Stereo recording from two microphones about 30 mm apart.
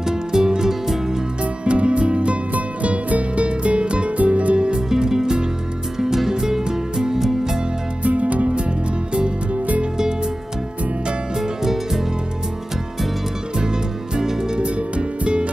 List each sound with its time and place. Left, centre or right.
0.0 s music: right
1.4 s music: right
2.5 s music: right
4.2 s music: right
4.6 s music: right
4.8 s music: right
8.0 s music: right
11.3 s music: centre
14.6 s music: right